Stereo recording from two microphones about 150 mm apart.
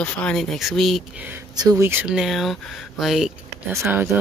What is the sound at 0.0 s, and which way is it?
Speech, 5° left (ahead or behind).